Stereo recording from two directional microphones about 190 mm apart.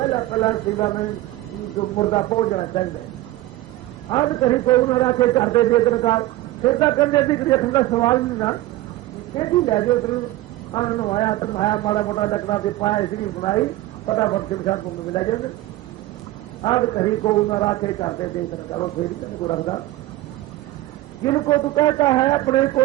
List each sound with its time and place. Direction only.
0.1 s a man's voice: 25° left (ahead or behind)
4.1 s a man's voice: 20° left (ahead or behind)
16.6 s a man's voice: 25° left (ahead or behind)
19.5 s a man's voice: 25° left (ahead or behind)
21.2 s a man's voice: 25° left (ahead or behind)